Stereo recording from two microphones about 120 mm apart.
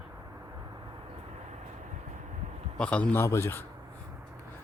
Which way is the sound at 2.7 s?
10° left (ahead or behind).